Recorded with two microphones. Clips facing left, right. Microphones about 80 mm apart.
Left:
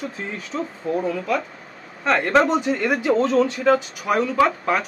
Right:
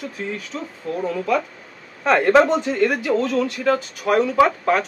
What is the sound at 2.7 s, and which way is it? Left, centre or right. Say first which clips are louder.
Speech: right 2 dB; centre.